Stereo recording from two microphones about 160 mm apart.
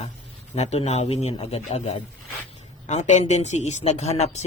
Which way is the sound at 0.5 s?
45° left (ahead or behind).